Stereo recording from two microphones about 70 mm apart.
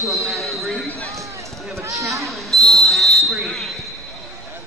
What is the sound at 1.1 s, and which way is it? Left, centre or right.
Run, right.